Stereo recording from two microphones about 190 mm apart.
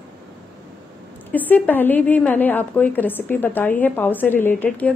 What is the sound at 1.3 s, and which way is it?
A woman's voice, 10° left (ahead or behind).